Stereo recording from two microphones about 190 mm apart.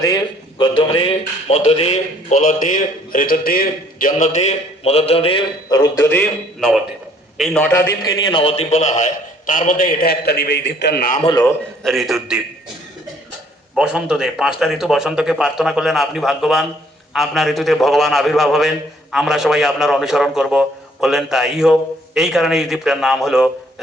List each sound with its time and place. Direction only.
0.6 s a man's voice: 25° left (ahead or behind)
6.6 s a man's voice: centre (ahead or behind); by 11.2 s 50° left (ahead or behind)
11.3 s a man's voice: 20° left (ahead or behind)
11.8 s a man's voice: centre (ahead or behind)
13.7 s a man's voice: 5° right (ahead or behind)